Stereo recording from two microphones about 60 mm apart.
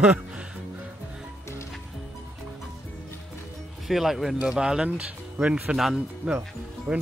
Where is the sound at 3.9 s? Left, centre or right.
Centre.